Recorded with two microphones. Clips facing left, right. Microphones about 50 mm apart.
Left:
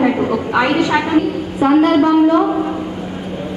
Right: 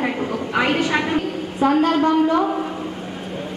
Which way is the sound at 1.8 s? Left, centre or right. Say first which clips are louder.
Left 7 dB; left.